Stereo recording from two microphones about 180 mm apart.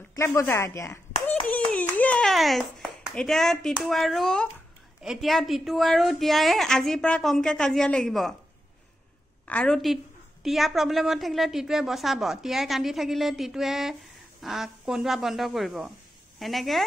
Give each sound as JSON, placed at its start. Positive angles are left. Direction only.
{"t": 0.1, "sound": "a child's voice", "side_deg": 15}
{"t": 9.5, "sound": "a woman's voice", "side_deg": 5}